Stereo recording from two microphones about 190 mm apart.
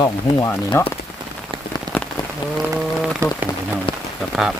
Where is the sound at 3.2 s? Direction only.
15° right (ahead or behind).